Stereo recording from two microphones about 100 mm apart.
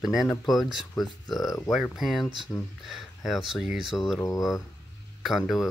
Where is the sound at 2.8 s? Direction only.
Centre (ahead or behind).